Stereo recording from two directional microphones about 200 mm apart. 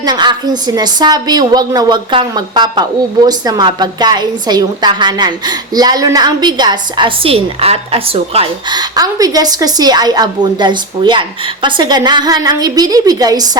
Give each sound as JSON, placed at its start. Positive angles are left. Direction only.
{"t": 0.0, "sound": "a woman's voice", "side_deg": -20}